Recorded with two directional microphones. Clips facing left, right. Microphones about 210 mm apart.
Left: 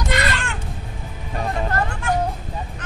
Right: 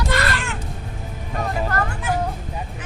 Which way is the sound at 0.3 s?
Centre (ahead or behind).